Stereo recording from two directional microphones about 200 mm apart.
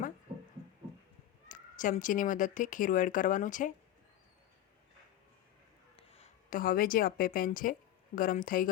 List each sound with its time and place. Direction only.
1.5 s speech: 40° left (ahead or behind)
6.0 s a woman's voice: 30° left (ahead or behind)